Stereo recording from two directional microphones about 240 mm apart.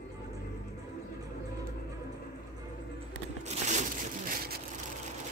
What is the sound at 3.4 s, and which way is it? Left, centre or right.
Crushing, right.